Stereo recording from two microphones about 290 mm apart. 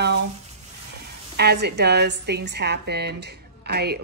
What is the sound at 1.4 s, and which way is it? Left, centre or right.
A woman's voice, right.